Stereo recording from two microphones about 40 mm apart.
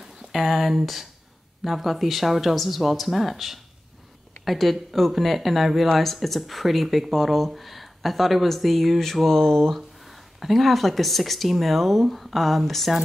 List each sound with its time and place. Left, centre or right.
0.0 s speech: centre
9.8 s speech: centre